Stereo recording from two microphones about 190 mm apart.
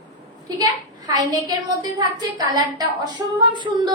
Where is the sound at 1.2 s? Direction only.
20° right (ahead or behind).